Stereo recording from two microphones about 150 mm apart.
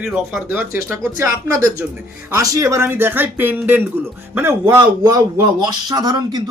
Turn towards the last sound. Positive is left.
turn(degrees=-25)  # may be behind; listen again after turning